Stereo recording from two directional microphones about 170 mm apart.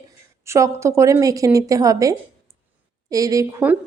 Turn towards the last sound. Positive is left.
turn(degrees=-15)  # may be behind; listen again after turning